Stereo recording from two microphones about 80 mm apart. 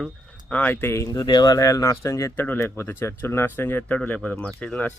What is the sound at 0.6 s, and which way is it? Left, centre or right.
Speech, left.